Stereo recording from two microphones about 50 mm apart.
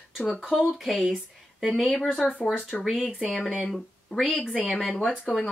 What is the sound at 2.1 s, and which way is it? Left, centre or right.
Speech, left.